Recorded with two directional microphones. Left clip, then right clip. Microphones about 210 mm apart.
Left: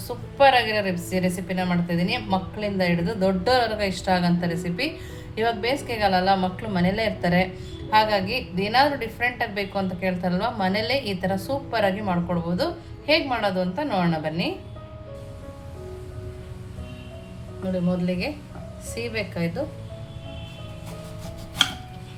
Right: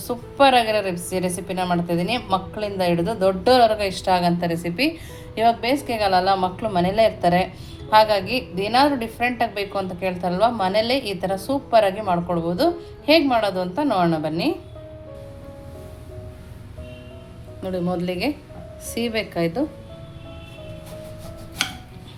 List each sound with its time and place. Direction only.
0.3 s a woman's voice: 30° right (ahead or behind)
17.7 s a woman's voice: 40° right (ahead or behind)